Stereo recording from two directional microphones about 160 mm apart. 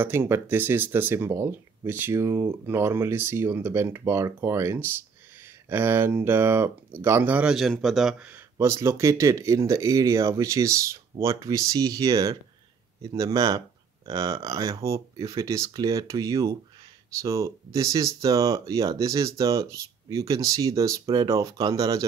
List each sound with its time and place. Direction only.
0.0 s speech: 15° right (ahead or behind)